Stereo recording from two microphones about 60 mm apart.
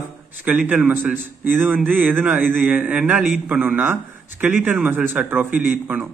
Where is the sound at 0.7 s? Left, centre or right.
Right.